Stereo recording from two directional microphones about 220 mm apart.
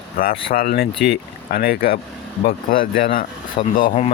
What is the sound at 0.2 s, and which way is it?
Speech, 40° left (ahead or behind).